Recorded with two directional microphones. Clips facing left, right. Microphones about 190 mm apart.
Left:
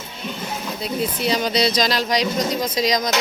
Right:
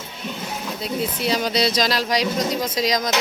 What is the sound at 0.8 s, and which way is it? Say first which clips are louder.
Speech: left 1 dB; centre (ahead or behind).